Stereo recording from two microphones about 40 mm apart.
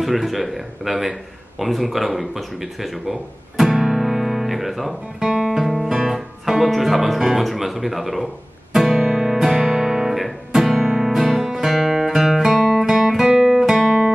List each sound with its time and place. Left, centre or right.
0.0 s speech: centre
1.6 s a sound: centre
5.2 s guitar: centre
5.6 s guitar: centre
5.9 s music: centre
6.7 s speech: centre
8.7 s music: centre
9.5 s music: centre
9.8 s music: centre
12.8 s guitar: centre
13.3 s guitar: centre